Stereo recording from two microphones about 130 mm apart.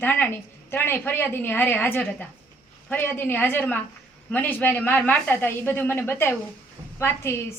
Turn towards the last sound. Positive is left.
turn(degrees=20)  # may be behind; listen again after turning